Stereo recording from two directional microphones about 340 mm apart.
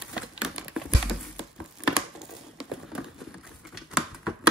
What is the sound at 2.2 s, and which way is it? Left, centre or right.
Patter, centre.